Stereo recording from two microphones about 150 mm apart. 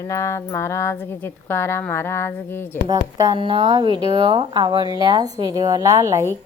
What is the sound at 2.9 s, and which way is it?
A woman's voice, 25° right (ahead or behind).